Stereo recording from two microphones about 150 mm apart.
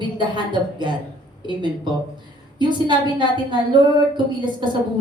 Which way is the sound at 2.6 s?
30° right (ahead or behind).